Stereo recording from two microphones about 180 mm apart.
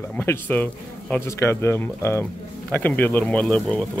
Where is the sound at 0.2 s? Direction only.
10° left (ahead or behind).